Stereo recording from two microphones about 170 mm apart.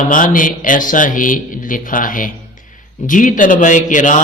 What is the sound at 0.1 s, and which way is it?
Speech, 50° left (ahead or behind).